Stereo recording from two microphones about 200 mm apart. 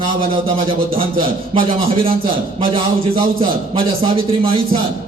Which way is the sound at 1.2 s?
25° right (ahead or behind).